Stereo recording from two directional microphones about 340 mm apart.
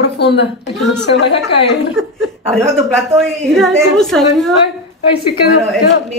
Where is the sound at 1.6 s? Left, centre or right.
Left.